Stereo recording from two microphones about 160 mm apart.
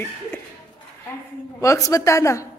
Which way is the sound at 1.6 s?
20° left (ahead or behind).